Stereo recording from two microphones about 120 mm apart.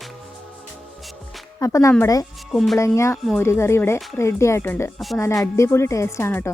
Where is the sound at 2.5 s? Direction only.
Centre (ahead or behind).